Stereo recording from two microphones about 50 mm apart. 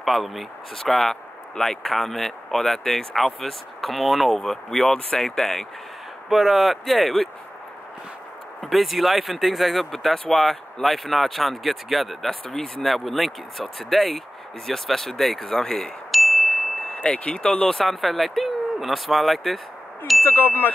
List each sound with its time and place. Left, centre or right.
0.0 s speech: centre
6.2 s speech: centre
8.5 s speech: centre
12.3 s speech: centre
16.1 s chime: centre
17.0 s speech: left; by 19.6 s centre
20.2 s speech: left